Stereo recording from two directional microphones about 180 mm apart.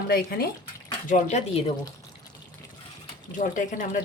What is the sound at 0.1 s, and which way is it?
Speech, 55° left (ahead or behind).